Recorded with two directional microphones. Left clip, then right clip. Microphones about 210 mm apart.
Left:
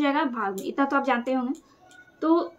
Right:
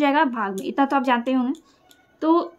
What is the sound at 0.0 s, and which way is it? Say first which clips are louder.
Speech: right 5 dB; 50° right (ahead or behind).